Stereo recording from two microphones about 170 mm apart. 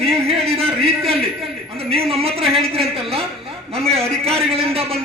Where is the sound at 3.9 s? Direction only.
35° right (ahead or behind).